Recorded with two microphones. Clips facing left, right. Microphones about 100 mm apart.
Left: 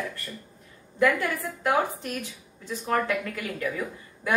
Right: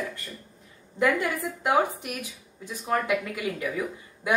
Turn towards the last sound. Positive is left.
turn(degrees=-15)  # may be behind; listen again after turning